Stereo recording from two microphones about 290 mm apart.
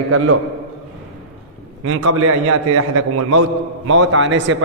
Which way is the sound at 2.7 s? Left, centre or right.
Right.